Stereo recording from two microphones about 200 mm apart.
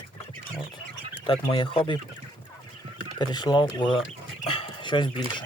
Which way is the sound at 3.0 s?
20° left (ahead or behind).